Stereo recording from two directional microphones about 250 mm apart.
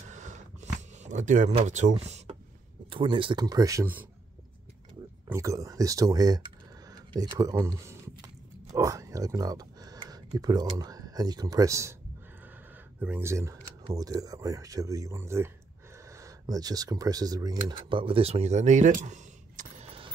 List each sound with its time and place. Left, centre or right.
0.1 s a sound: right
2.9 s speech: centre
5.3 s speech: centre
6.9 s a sound: centre
8.7 s speech: centre
13.0 s speech: centre; by 20.1 s right